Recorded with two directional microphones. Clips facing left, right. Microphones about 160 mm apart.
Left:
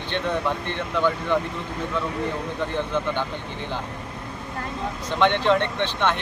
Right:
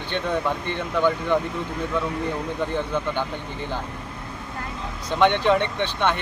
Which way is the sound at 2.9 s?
15° right (ahead or behind).